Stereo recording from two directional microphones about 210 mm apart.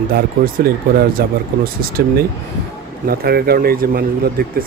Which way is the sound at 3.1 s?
45° right (ahead or behind).